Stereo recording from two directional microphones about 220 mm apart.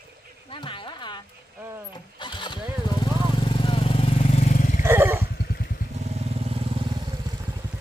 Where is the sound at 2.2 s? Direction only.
20° left (ahead or behind).